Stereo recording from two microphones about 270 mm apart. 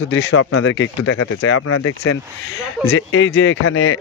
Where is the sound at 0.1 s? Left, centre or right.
Left.